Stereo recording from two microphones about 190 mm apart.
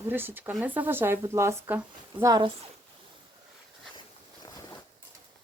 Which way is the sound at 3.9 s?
25° left (ahead or behind).